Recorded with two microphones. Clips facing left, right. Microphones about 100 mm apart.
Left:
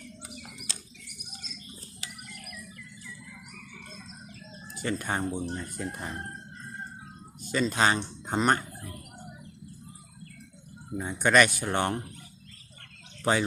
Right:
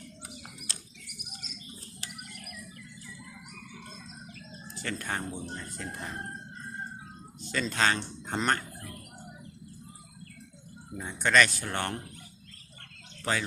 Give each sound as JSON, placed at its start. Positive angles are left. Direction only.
{"t": 4.7, "sound": "speech", "side_deg": 15}
{"t": 7.4, "sound": "speech", "side_deg": 10}
{"t": 10.9, "sound": "speech", "side_deg": 15}
{"t": 13.3, "sound": "speech", "side_deg": 20}